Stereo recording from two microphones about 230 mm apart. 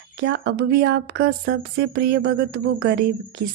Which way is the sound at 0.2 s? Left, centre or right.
Right.